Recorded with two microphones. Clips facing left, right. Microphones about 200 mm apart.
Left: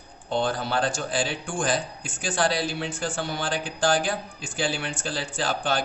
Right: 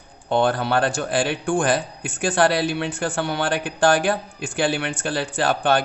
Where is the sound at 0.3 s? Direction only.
60° right (ahead or behind).